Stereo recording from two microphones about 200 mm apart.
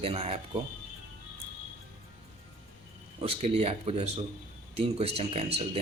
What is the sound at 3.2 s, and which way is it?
Speech, 30° right (ahead or behind).